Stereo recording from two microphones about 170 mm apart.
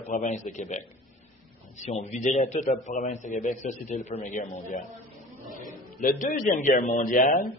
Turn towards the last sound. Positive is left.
turn(degrees=50)  # may be behind; listen again after turning